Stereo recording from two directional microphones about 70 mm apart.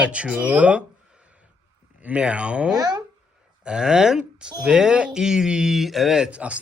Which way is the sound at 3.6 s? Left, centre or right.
Centre.